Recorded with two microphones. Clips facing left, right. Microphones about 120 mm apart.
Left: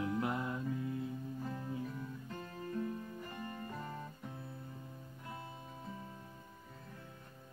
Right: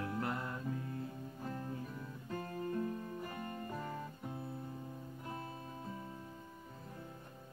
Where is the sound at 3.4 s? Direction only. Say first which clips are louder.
Right 1 dB; 25° right (ahead or behind).